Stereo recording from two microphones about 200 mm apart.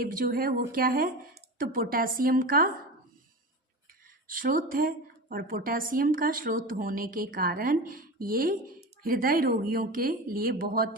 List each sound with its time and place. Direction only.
0.0 s a woman's voice: 45° right (ahead or behind)
4.3 s a woman's voice: 45° right (ahead or behind)